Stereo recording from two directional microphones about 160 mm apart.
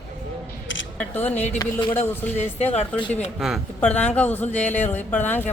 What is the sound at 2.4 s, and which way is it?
Speech, 45° left (ahead or behind).